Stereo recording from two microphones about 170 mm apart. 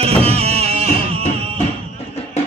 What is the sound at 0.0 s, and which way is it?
Music, 35° right (ahead or behind).